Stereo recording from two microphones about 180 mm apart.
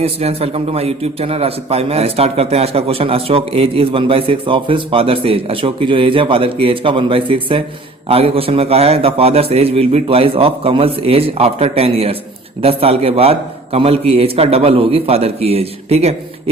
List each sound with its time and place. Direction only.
0.0 s a man's voice: 35° right (ahead or behind)